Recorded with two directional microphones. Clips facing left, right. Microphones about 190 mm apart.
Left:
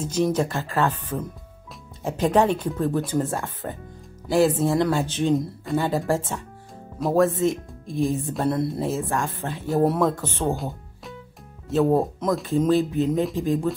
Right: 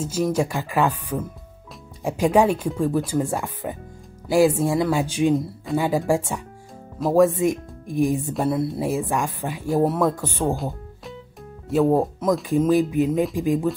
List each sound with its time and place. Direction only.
0.0 s speech: 5° right (ahead or behind)
3.3 s speech: 15° right (ahead or behind)
5.3 s a woman's voice: centre (ahead or behind)
6.0 s speech: 15° right (ahead or behind)
8.2 s a woman's voice: centre (ahead or behind)
8.8 s speech: 15° right (ahead or behind)
9.7 s a woman's voice: centre (ahead or behind)
10.5 s music: centre (ahead or behind)
11.7 s speech: 10° right (ahead or behind)